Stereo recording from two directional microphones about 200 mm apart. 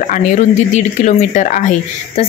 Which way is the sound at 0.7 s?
35° left (ahead or behind).